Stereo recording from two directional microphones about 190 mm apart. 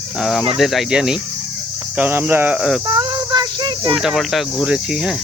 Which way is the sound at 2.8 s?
25° right (ahead or behind).